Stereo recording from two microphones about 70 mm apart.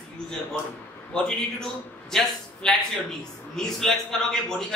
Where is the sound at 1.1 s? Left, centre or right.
Centre.